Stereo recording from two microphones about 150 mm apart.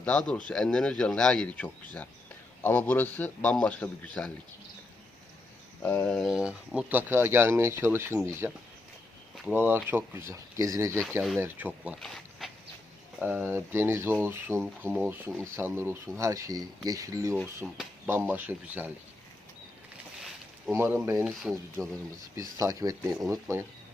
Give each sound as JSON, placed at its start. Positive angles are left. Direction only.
{"t": 0.0, "sound": "speech", "side_deg": 5}
{"t": 5.8, "sound": "speech", "side_deg": 15}
{"t": 6.1, "sound": "speech", "side_deg": -5}
{"t": 12.0, "sound": "a sound", "side_deg": 0}
{"t": 13.1, "sound": "speech", "side_deg": -5}
{"t": 17.6, "sound": "speech", "side_deg": -5}
{"t": 18.0, "sound": "speech", "side_deg": -15}
{"t": 20.7, "sound": "speech", "side_deg": -15}
{"t": 21.5, "sound": "speech", "side_deg": -5}
{"t": 22.4, "sound": "speech", "side_deg": -20}